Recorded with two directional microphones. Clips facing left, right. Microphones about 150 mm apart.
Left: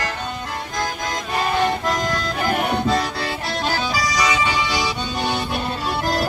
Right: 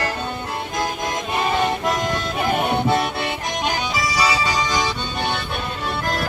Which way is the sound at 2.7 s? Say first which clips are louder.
Right 1 dB; 25° right (ahead or behind).